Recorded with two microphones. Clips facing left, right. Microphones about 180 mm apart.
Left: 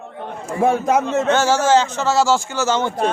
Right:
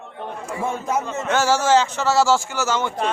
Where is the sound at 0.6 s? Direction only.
85° left.